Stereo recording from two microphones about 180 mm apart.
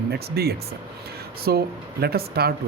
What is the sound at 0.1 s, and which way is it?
Speech, 60° right (ahead or behind).